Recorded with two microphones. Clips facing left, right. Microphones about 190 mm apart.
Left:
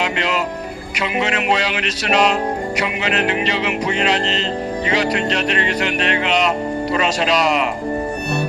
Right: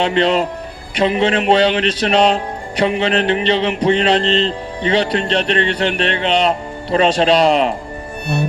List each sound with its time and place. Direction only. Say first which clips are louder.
0.0 s music: right 6 dB; 30° right (ahead or behind)